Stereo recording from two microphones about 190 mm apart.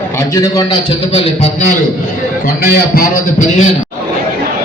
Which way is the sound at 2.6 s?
50° left (ahead or behind).